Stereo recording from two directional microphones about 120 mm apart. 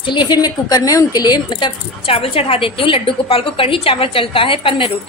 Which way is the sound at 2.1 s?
55° left (ahead or behind).